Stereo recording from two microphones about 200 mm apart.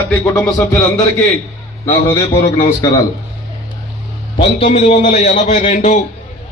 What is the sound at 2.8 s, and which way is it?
Speech, 20° left (ahead or behind).